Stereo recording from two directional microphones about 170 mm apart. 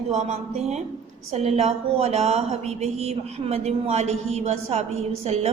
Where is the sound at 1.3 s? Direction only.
40° right (ahead or behind).